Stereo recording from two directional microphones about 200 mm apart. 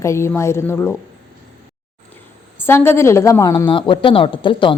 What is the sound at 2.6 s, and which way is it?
A woman's voice, 10° left (ahead or behind).